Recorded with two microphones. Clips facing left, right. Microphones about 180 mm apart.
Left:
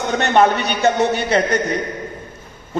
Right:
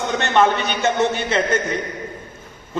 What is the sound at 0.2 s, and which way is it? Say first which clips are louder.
A man's voice: left 3 dB; 40° left (ahead or behind).